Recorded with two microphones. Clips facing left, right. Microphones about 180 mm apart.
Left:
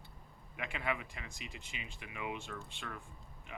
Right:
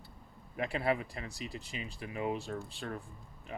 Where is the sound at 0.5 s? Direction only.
35° right (ahead or behind).